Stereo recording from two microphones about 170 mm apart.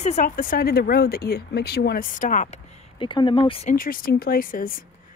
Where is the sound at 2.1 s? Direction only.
50° left (ahead or behind).